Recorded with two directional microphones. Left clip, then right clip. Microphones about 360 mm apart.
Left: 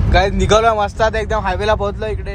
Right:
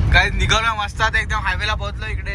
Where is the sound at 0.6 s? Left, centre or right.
Centre.